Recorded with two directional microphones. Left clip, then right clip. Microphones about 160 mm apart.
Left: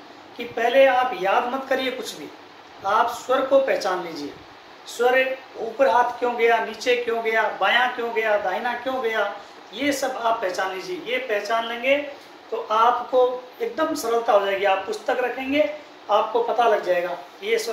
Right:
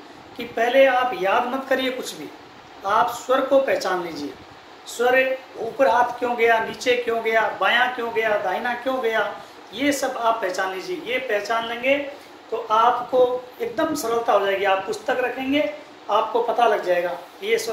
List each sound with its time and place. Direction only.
0.4 s speech: 25° right (ahead or behind)
13.6 s a woman's voice: 20° right (ahead or behind)